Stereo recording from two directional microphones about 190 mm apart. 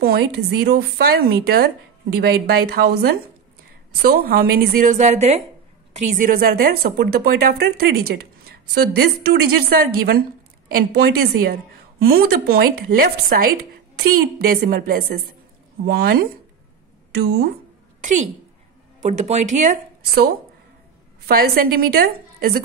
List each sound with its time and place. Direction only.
0.0 s speech: 55° right (ahead or behind)
18.0 s speech: 40° right (ahead or behind)
21.3 s speech: 50° right (ahead or behind)